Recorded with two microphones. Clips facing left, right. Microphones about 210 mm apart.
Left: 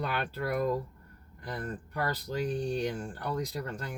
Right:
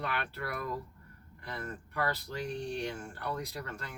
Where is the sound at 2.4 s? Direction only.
30° left (ahead or behind).